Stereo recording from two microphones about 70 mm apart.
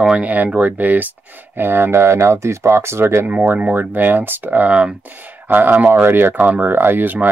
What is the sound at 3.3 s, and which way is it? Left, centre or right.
Speech, centre.